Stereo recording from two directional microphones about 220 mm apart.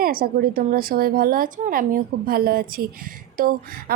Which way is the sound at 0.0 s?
40° right (ahead or behind).